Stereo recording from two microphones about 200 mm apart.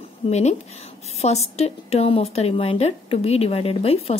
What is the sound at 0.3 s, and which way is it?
Speech, 35° left (ahead or behind).